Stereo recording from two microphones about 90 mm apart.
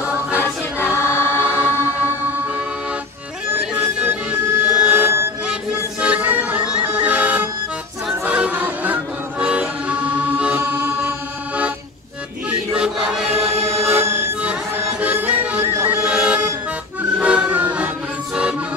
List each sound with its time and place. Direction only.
0.4 s choir: 25° left (ahead or behind)
1.4 s music: 20° right (ahead or behind)
5.5 s music: 15° right (ahead or behind)
10.7 s music: 25° right (ahead or behind)
12.4 s chant: 10° right (ahead or behind)
13.8 s music: 25° right (ahead or behind)
14.4 s music: 15° right (ahead or behind)
16.0 s music: 10° right (ahead or behind)